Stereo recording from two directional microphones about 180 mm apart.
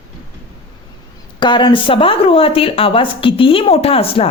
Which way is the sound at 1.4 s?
25° left (ahead or behind).